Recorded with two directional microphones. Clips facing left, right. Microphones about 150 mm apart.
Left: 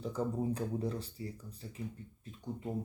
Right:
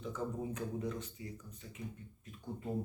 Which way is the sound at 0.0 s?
35° left (ahead or behind).